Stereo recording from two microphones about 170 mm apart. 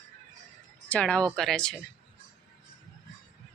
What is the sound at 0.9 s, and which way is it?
Speech, 5° left (ahead or behind).